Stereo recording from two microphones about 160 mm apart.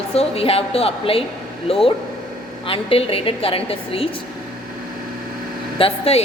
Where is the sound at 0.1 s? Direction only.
40° left (ahead or behind).